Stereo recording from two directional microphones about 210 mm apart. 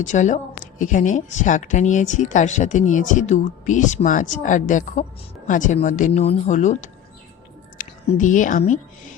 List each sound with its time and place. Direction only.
0.0 s a woman's voice: 35° left (ahead or behind)